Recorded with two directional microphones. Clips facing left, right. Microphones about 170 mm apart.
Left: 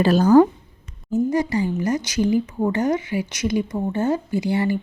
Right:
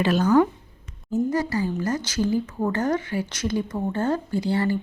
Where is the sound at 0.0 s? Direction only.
35° left (ahead or behind).